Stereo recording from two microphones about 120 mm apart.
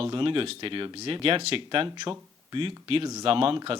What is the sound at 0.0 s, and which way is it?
Speech, 45° right (ahead or behind).